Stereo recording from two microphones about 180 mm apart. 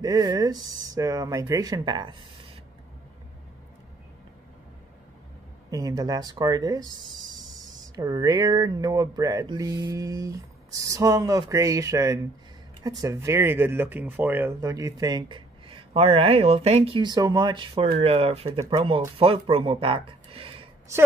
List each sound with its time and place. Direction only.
0.0 s speech: 20° right (ahead or behind)
5.7 s speech: 20° right (ahead or behind)